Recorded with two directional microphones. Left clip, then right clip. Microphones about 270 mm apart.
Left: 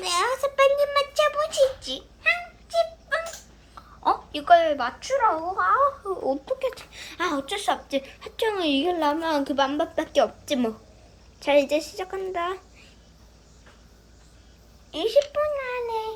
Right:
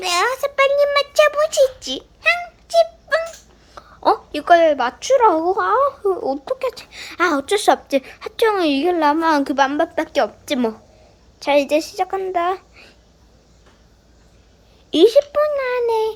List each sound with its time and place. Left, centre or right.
0.0 s a sound: centre
4.9 s a child's voice: right
6.2 s speech: centre
15.1 s a child's voice: centre